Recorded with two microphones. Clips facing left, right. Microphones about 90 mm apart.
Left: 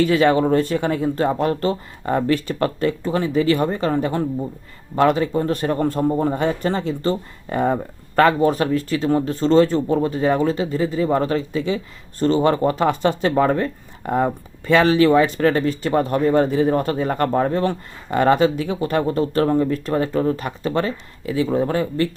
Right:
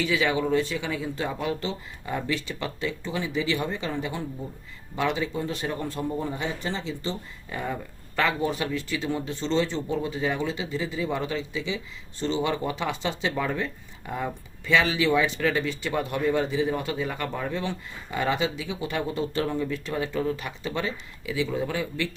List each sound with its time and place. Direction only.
0.0 s speech: 50° left (ahead or behind)